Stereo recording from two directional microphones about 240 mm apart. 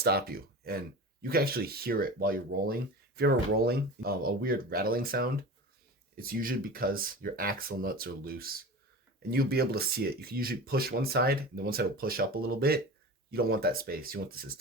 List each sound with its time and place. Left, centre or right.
0.0 s speech: right